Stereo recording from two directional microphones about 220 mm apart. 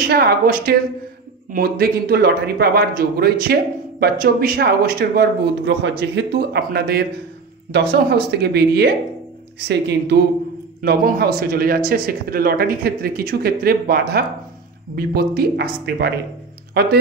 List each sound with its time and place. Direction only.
0.0 s speech: 45° right (ahead or behind)